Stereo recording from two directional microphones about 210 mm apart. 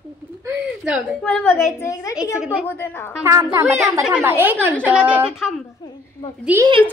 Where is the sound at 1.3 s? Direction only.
10° left (ahead or behind).